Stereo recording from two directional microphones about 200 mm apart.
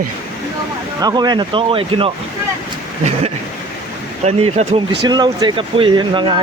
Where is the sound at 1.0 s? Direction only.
20° right (ahead or behind).